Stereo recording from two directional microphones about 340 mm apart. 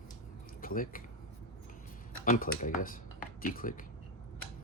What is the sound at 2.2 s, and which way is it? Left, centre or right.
Speech, left.